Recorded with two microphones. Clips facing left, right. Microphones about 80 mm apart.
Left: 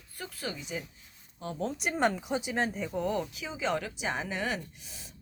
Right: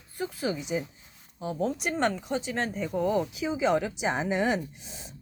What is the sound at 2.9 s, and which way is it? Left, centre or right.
Speech, centre.